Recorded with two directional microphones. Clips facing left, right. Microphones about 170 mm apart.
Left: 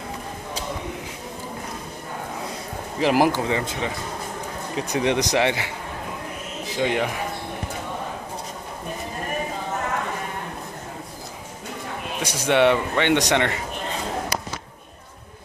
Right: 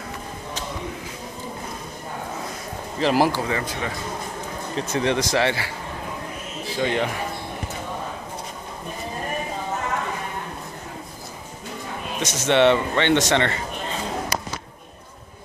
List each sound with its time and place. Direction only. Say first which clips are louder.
3.0 s a man's voice: left 1 dB; 15° left (ahead or behind)
12.2 s speech: right 1 dB; 10° left (ahead or behind)